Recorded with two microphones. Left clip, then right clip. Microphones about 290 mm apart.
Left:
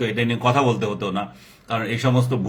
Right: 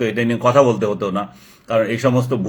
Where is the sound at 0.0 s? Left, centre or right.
Centre.